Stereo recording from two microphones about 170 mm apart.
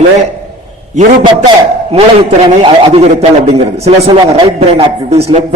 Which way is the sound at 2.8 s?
35° right (ahead or behind).